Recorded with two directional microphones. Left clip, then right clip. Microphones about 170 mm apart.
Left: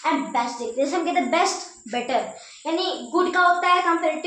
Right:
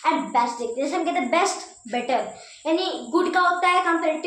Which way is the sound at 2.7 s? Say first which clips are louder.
Left 2 dB; 20° right (ahead or behind).